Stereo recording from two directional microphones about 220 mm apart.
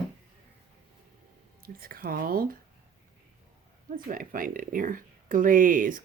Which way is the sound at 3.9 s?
40° right (ahead or behind).